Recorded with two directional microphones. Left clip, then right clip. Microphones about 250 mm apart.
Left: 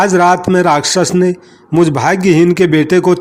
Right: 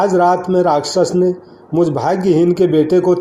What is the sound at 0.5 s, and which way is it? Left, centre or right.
Speech, left.